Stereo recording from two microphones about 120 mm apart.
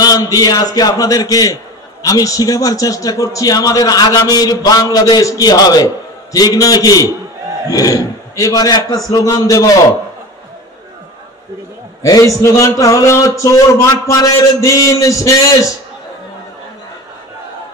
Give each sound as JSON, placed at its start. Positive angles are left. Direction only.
{"t": 0.0, "sound": "a man's voice", "side_deg": 30}
{"t": 12.0, "sound": "a man's voice", "side_deg": 25}